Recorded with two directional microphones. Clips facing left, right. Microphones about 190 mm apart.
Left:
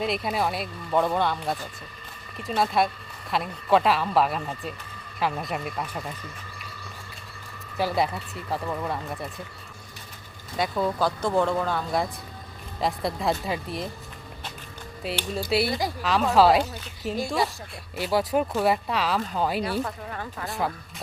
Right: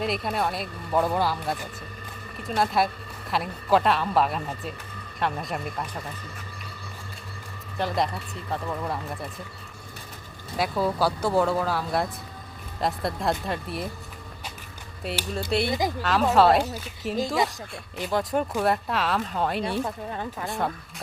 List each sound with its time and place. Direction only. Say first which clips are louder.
0.0 s speech: left 1 dB; centre (ahead or behind)
7.8 s speech: left 1 dB; 5° left (ahead or behind)
10.6 s speech: right 1 dB; 5° right (ahead or behind)
15.0 s speech: left 1 dB; centre (ahead or behind)
17.2 s speech: right 1 dB; 20° right (ahead or behind)
17.9 s speech: left 2 dB; 5° left (ahead or behind)
19.8 s speech: right 2 dB; 20° right (ahead or behind)
20.5 s speech: even; centre (ahead or behind)